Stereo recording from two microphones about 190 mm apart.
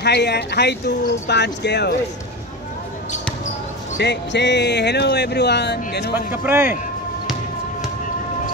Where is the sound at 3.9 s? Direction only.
65° left (ahead or behind).